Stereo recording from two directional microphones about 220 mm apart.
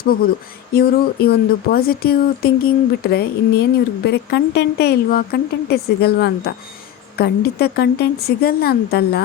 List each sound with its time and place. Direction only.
0.0 s speech: 40° left (ahead or behind)